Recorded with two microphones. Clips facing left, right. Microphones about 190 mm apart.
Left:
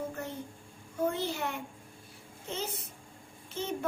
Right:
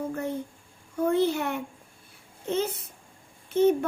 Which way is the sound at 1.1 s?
60° right (ahead or behind).